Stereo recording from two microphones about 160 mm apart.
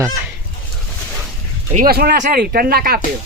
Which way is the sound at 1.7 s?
65° right (ahead or behind).